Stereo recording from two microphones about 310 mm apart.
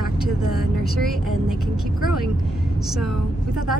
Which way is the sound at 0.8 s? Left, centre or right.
Centre.